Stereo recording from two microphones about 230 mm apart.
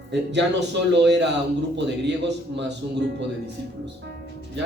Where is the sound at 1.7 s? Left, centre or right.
Right.